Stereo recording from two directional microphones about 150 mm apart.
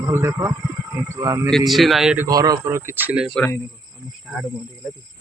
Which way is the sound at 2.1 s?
20° right (ahead or behind).